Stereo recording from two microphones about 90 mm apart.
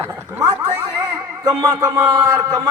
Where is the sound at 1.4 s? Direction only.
50° right (ahead or behind).